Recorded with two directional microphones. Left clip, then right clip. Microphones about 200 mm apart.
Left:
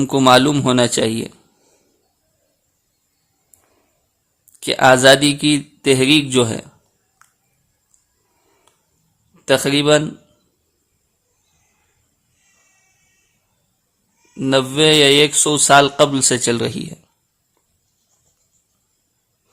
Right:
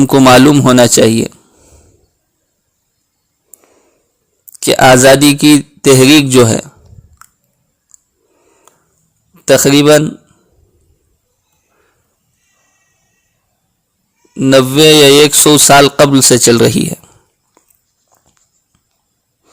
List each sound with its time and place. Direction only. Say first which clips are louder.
0.0 s speech: right 7 dB; 30° right (ahead or behind)
4.6 s speech: right 6 dB; 30° right (ahead or behind)
8.7 s a sound: right 12 dB; 25° right (ahead or behind)
9.3 s a man's voice: right 8 dB; 30° right (ahead or behind)
14.3 s speech: right 9 dB; 25° right (ahead or behind)